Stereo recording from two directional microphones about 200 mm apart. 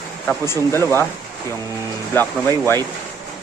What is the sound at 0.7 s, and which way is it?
Speech, 10° left (ahead or behind).